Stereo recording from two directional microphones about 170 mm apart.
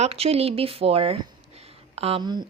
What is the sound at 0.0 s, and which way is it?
A woman's voice, 35° right (ahead or behind).